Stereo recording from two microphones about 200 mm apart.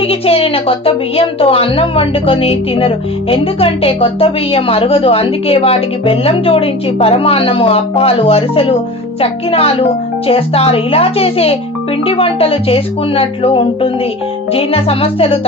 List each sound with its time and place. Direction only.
0.0 s a woman's voice: 30° left (ahead or behind)